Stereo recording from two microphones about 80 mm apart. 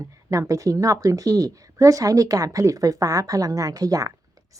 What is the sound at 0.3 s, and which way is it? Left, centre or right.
A woman's voice, right.